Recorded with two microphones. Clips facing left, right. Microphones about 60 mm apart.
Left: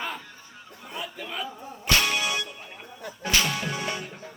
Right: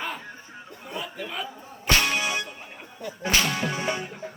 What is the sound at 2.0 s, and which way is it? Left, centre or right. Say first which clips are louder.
Music: right 1 dB; centre.